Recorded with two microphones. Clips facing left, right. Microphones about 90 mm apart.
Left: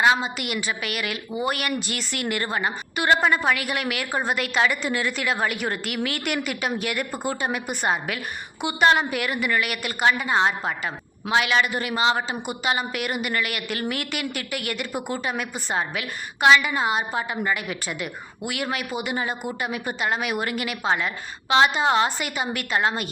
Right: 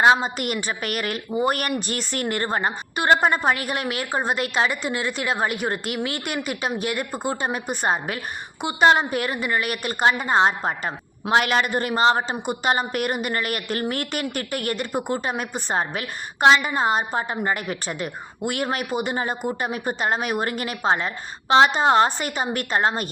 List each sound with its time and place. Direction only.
0.0 s a woman's voice: 35° right (ahead or behind)
7.3 s a woman's voice: 35° right (ahead or behind)
15.2 s a woman's voice: 40° right (ahead or behind)